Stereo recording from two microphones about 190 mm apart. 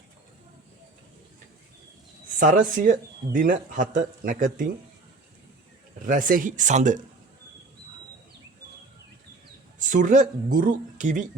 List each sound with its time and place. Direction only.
2.4 s speech: 45° right (ahead or behind)
6.1 s speech: 45° right (ahead or behind)
9.7 s speech: 40° right (ahead or behind)